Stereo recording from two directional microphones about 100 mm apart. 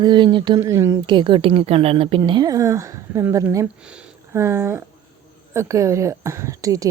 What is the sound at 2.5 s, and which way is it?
Speech, 35° right (ahead or behind).